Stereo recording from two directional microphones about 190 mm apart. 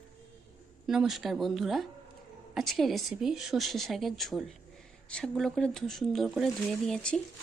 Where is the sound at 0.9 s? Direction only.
Centre (ahead or behind).